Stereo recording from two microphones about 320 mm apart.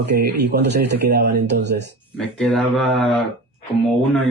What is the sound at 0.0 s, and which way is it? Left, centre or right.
Speech, right.